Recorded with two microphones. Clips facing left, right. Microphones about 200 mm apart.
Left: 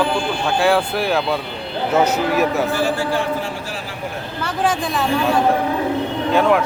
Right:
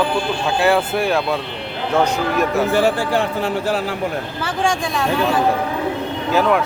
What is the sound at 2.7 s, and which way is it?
A man's voice, 60° right (ahead or behind).